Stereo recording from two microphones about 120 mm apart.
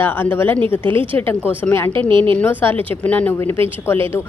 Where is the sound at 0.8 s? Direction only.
45° right (ahead or behind).